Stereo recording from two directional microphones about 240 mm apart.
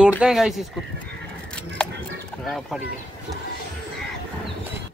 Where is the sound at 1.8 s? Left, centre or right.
Centre.